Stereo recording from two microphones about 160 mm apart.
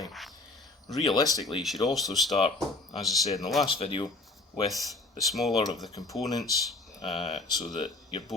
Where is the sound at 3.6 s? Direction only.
35° left (ahead or behind).